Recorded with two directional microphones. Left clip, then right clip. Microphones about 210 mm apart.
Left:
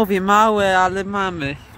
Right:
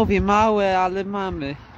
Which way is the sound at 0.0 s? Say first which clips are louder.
Left 3 dB; centre (ahead or behind).